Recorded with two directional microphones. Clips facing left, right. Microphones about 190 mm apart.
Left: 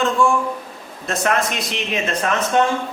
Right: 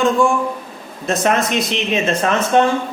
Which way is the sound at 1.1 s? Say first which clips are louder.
Right 3 dB; 20° right (ahead or behind).